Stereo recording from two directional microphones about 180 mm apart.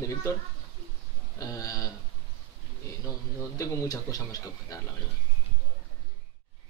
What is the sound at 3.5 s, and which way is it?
A man's voice, 20° left (ahead or behind).